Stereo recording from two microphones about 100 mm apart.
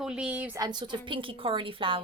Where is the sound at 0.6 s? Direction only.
45° right (ahead or behind).